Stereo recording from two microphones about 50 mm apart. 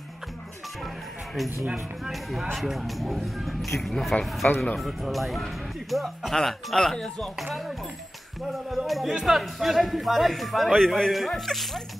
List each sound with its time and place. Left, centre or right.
1.3 s speech: centre
4.4 s speech: left
4.7 s speech: centre
6.3 s speech: centre
8.4 s speech: centre